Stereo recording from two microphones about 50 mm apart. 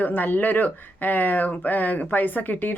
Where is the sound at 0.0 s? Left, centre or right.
Left.